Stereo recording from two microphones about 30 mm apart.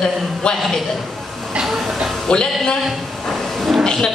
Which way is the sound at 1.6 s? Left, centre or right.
Centre.